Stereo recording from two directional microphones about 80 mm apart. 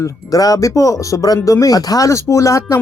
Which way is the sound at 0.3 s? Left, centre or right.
Left.